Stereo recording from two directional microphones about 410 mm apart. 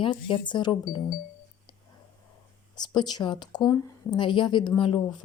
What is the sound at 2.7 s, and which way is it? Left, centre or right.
Speech, centre.